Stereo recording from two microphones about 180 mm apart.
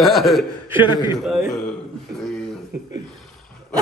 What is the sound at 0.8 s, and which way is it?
Speech, 25° left (ahead or behind).